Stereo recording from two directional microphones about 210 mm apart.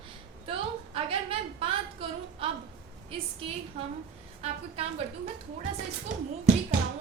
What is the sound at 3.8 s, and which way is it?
A woman's voice, 30° right (ahead or behind).